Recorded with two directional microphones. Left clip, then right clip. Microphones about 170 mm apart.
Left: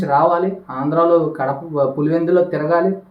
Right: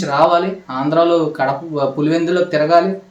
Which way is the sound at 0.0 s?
5° right (ahead or behind).